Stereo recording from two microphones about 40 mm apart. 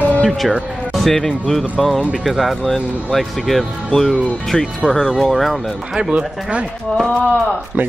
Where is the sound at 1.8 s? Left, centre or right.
Centre.